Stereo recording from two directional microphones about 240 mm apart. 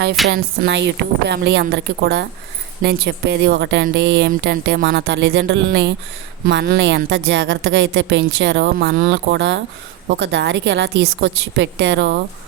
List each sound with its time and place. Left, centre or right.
0.3 s a woman's voice: right